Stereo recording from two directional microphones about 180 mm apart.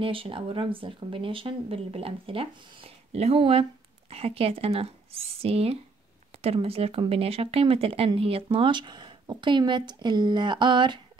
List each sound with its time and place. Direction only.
0.0 s speech: 30° right (ahead or behind)